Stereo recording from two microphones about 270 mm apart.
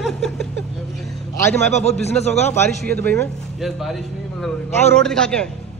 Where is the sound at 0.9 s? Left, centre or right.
Centre.